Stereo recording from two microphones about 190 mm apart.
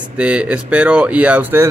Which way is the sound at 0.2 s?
5° right (ahead or behind).